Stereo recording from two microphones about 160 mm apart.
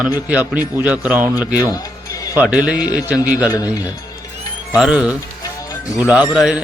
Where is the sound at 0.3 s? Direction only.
10° right (ahead or behind).